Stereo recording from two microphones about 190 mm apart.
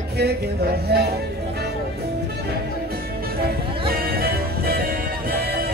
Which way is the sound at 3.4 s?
55° right (ahead or behind).